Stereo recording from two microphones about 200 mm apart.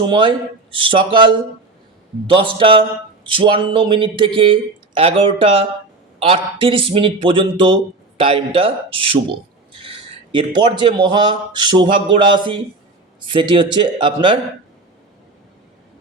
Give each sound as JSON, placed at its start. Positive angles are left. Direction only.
{"t": 0.0, "sound": "speech", "side_deg": -25}